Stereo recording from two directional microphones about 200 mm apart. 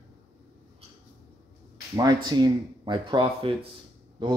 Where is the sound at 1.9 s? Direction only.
20° right (ahead or behind).